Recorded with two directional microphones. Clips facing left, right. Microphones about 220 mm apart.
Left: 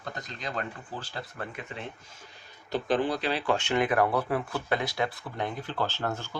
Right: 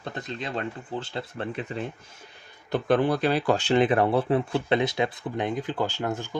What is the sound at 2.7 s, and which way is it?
Speech, 55° right (ahead or behind).